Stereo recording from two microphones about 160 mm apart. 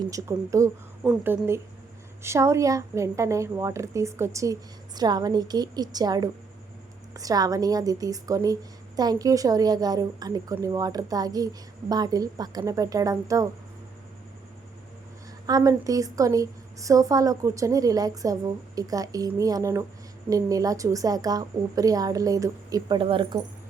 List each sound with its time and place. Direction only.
0.0 s a woman's voice: 20° right (ahead or behind)
15.4 s a woman's voice: 20° right (ahead or behind)